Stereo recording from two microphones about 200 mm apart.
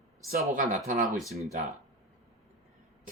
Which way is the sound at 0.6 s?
40° right (ahead or behind).